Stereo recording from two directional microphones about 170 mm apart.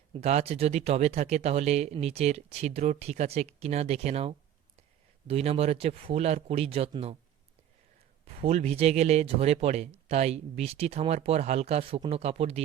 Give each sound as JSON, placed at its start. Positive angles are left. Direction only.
{"t": 0.1, "sound": "a man's voice", "side_deg": -40}
{"t": 8.2, "sound": "a man's voice", "side_deg": -35}